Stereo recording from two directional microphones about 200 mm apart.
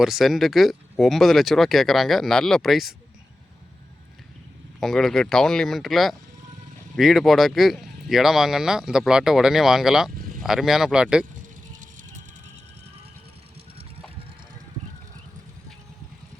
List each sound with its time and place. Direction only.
0.0 s speech: centre (ahead or behind)
4.8 s speech: centre (ahead or behind)
11.7 s music: 40° right (ahead or behind)